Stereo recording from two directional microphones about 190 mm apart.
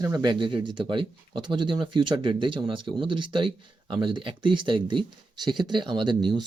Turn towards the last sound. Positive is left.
turn(degrees=-25)  # may be behind; listen again after turning